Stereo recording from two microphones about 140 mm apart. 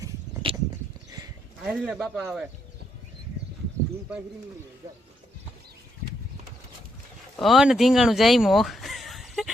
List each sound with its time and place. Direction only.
0.4 s a sound: 40° right (ahead or behind)
1.6 s speech: 5° right (ahead or behind)
7.3 s speech: centre (ahead or behind)